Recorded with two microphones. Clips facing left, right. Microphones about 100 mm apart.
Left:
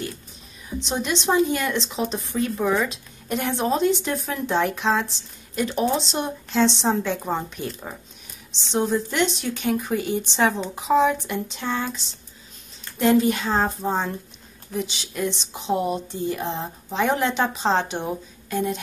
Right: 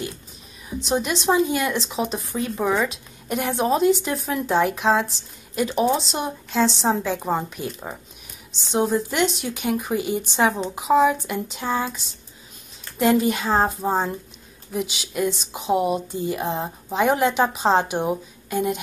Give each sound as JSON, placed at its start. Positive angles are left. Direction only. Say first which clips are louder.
{"t": 0.8, "sound": "speech", "louder": "right 3 dB", "side_deg": -5}
{"t": 13.0, "sound": "speech", "louder": "even", "side_deg": -5}